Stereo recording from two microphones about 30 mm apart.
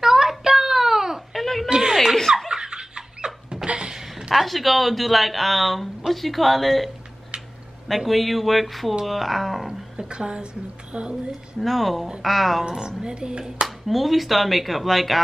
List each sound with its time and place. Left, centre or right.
0.0 s child singing: centre
1.3 s a sound: centre
1.7 s a sound: right
2.5 s laughter: right
4.3 s speech: centre
7.9 s speech: centre
10.1 s a woman's voice: right
11.6 s speech: centre
12.6 s a woman's voice: right
13.8 s speech: centre